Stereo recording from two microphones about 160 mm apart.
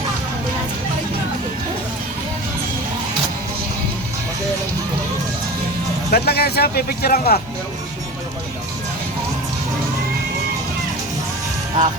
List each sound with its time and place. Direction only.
6.1 s speech: 80° left